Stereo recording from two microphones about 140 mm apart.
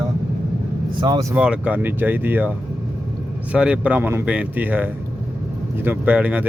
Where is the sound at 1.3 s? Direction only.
10° right (ahead or behind).